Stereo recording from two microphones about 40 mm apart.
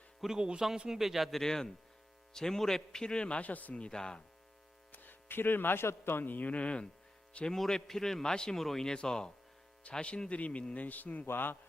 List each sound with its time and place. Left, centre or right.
0.3 s speech: centre
0.9 s a man's voice: centre
1.3 s a man's voice: centre; by 3.5 s left
3.5 s speech: left
3.8 s speech: left
4.9 s speech: left
6.2 s speech: left
7.5 s a man's voice: centre; by 11.3 s left
11.3 s a man's voice: left